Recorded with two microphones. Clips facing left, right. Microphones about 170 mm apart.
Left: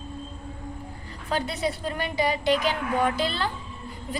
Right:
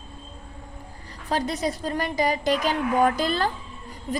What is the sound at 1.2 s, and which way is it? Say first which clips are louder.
A woman's voice: right 2 dB; 40° right (ahead or behind).